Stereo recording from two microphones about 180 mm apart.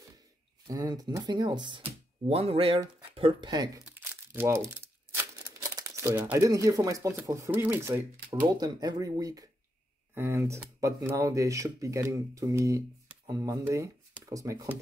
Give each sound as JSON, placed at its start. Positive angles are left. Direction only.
{"t": 0.7, "sound": "speech", "side_deg": -20}
{"t": 3.8, "sound": "crumpling", "side_deg": -10}
{"t": 5.1, "sound": "speech", "side_deg": -15}